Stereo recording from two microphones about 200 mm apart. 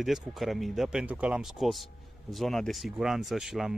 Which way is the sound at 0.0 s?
Centre (ahead or behind).